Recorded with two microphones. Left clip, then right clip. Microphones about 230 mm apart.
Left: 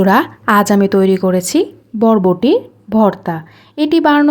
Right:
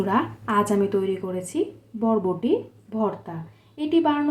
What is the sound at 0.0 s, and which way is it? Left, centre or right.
Speech, left.